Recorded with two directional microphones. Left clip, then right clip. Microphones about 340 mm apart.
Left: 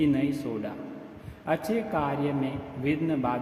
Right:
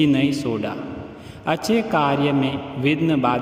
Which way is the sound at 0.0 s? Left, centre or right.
Right.